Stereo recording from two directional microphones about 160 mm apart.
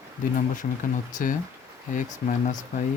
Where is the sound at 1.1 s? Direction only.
55° left (ahead or behind).